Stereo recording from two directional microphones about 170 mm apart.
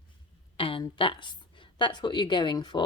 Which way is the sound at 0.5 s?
30° left (ahead or behind).